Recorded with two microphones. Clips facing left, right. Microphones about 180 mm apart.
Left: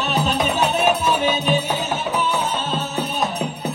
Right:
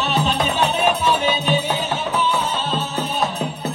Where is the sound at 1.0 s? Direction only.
5° left (ahead or behind).